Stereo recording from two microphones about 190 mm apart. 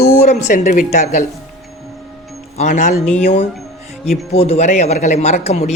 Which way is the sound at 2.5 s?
40° left (ahead or behind).